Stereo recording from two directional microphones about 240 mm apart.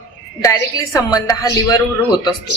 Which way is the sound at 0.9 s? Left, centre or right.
Centre.